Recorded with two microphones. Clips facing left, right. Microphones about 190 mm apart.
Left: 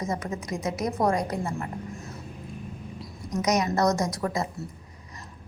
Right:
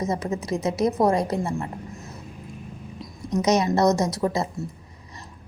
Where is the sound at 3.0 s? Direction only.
25° right (ahead or behind).